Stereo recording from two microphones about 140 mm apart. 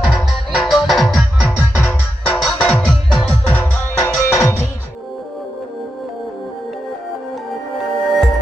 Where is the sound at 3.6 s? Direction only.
20° left (ahead or behind).